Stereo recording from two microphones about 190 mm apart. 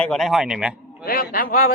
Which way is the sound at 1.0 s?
50° left (ahead or behind).